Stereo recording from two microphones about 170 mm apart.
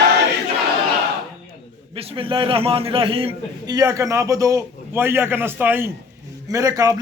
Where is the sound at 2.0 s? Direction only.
35° right (ahead or behind).